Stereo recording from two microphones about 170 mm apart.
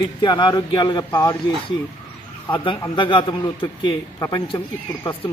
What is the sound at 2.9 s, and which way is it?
A man's voice, 30° left (ahead or behind).